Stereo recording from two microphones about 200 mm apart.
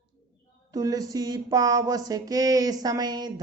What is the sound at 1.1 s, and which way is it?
Speech, 20° right (ahead or behind).